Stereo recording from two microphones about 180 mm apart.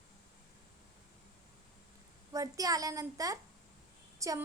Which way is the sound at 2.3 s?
20° right (ahead or behind).